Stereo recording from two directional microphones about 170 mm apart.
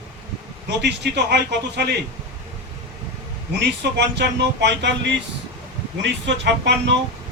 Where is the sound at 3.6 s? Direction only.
80° right.